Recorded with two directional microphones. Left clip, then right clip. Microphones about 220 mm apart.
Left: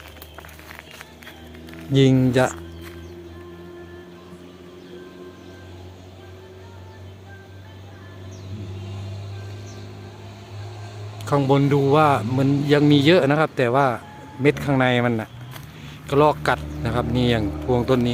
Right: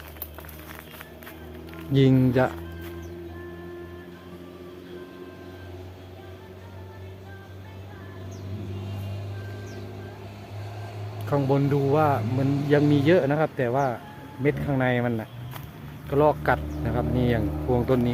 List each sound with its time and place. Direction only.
1.7 s speech: 5° left (ahead or behind)
11.3 s speech: 20° left (ahead or behind)